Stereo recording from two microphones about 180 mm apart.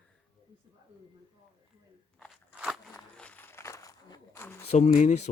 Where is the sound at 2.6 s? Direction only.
Centre (ahead or behind).